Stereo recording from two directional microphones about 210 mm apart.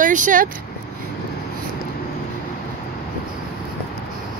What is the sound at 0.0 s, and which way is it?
Speech, 40° right (ahead or behind).